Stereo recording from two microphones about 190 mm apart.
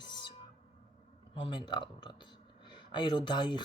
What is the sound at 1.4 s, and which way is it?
Speech, 25° left (ahead or behind).